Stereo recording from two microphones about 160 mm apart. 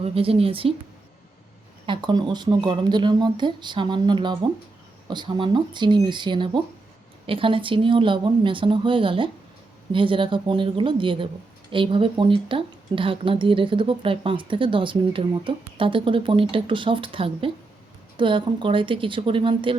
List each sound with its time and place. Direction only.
0.0 s speech: 35° right (ahead or behind)
1.9 s speech: 30° right (ahead or behind)